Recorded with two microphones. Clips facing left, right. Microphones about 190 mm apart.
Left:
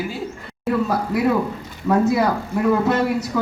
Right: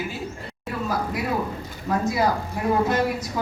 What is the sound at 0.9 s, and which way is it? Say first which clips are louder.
A woman's voice: left 3 dB; 65° left (ahead or behind).